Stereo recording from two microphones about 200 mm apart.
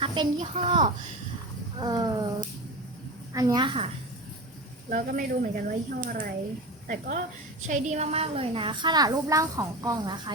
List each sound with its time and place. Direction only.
0.0 s a woman's voice: 25° right (ahead or behind)
4.9 s a child's voice: 40° right (ahead or behind); by 10.3 s 20° right (ahead or behind)